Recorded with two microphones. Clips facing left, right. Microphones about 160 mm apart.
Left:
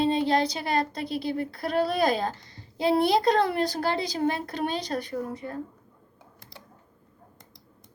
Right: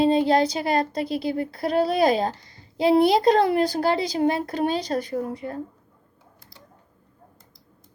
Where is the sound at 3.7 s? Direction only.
40° right (ahead or behind).